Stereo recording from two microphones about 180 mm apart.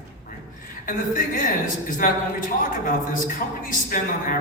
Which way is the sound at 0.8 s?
50° left (ahead or behind).